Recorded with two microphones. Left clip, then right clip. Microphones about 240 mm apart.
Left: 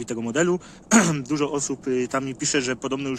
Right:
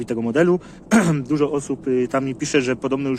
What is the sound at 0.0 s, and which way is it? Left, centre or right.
Speech, centre.